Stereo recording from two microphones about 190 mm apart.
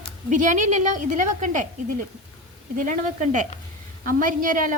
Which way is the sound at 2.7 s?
45° right (ahead or behind).